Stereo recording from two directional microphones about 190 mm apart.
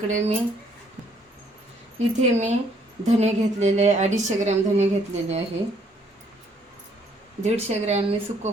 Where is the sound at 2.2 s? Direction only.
35° right (ahead or behind).